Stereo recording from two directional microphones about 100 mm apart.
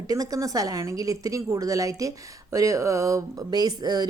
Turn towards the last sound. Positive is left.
turn(degrees=-45)  # may be behind; listen again after turning